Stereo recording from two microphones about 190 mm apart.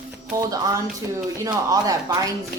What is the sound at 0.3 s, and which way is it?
A woman's voice, 20° right (ahead or behind).